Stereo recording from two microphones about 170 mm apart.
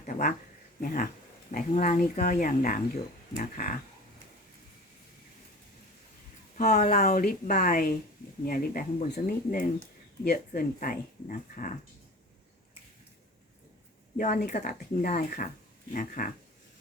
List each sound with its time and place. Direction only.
0.0 s speech: 50° left (ahead or behind)
6.7 s speech: 50° left (ahead or behind)
14.2 s speech: 45° left (ahead or behind)